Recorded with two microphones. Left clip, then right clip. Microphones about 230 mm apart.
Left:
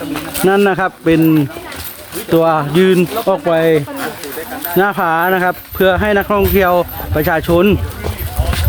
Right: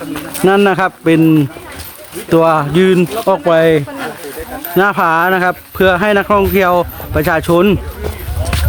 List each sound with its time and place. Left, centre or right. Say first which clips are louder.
0.4 s speech: right 2 dB; centre